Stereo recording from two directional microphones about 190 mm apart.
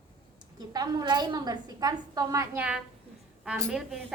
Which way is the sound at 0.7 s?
20° right (ahead or behind).